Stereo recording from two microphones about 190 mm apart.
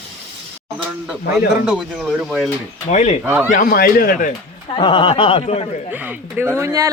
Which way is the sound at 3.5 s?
45° left (ahead or behind).